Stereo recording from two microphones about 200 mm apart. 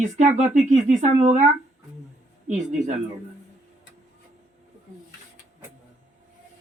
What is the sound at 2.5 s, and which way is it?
Speech, 35° right (ahead or behind).